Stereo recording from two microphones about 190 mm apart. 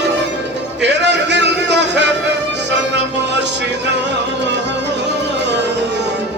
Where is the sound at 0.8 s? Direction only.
65° right (ahead or behind).